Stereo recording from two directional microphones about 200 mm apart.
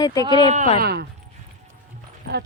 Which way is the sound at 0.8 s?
55° right (ahead or behind).